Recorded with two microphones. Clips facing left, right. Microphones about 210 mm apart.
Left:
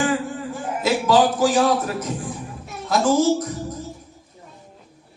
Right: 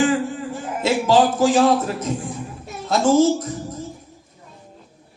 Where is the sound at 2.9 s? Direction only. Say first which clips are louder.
Right 3 dB; 25° right (ahead or behind).